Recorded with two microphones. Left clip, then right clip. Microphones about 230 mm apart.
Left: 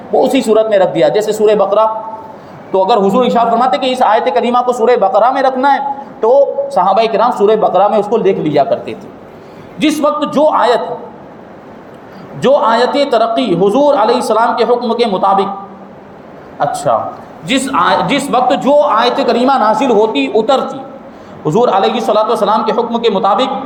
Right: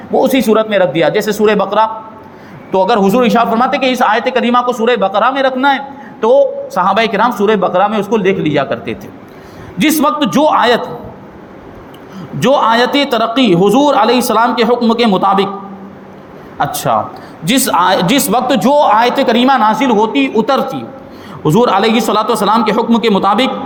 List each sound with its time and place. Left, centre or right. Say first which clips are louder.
0.1 s speech: left 1 dB; right
12.4 s speech: even; right
16.6 s speech: left 1 dB; right